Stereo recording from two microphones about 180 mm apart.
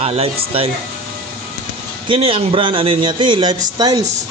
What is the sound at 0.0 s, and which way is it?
Speech, 35° right (ahead or behind).